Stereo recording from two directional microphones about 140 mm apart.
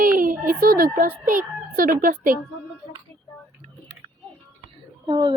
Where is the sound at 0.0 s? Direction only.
85° right.